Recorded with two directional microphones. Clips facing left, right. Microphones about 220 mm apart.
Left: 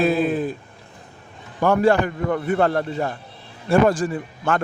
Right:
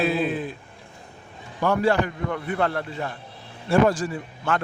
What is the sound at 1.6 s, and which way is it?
Speech, 50° left (ahead or behind).